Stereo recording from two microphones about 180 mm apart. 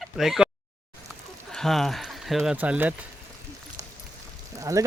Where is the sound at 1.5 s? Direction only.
Centre (ahead or behind).